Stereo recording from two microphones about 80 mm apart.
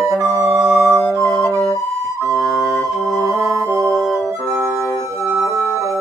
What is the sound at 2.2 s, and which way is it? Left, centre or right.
Flute, right.